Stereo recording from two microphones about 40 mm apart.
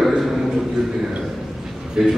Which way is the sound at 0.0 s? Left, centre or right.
Centre.